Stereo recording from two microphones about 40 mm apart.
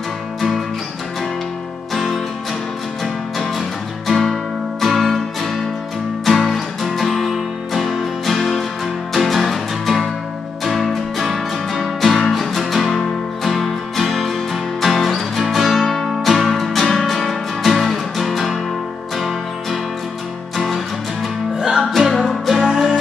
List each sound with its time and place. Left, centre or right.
3.0 s music: centre
21.5 s music: centre
21.9 s music: centre